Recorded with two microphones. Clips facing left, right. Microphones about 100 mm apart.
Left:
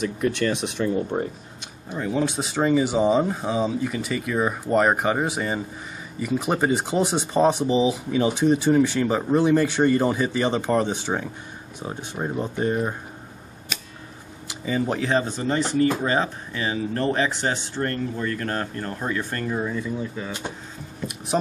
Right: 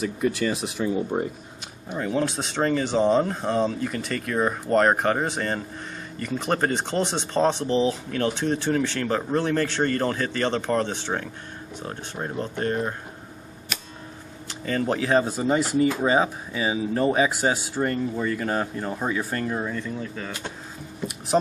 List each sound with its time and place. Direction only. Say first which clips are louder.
0.2 s speech: left 1 dB; 5° right (ahead or behind); by 12.9 s 10° left (ahead or behind)
14.5 s speech: even; 5° left (ahead or behind)
20.2 s speech: left 2 dB; 20° left (ahead or behind)